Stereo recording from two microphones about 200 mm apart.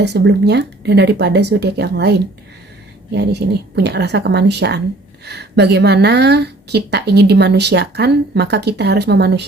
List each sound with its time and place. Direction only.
0.0 s a woman's voice: 60° right (ahead or behind)
3.2 s a woman's voice: 55° right (ahead or behind)